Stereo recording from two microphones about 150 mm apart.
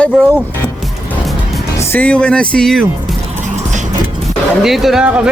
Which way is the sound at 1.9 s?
10° left (ahead or behind).